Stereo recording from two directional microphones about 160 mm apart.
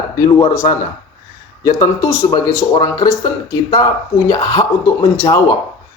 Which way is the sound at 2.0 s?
20° left (ahead or behind).